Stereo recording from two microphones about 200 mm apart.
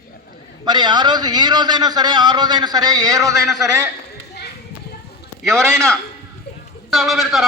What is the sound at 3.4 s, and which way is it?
Speech, centre (ahead or behind).